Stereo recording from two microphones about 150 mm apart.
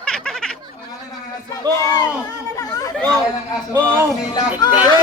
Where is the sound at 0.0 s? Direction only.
5° left (ahead or behind).